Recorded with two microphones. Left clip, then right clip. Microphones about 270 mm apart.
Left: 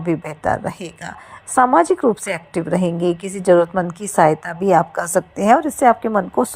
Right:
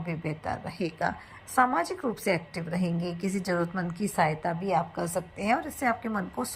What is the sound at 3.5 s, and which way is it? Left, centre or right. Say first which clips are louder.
A woman's voice: left 18 dB; left.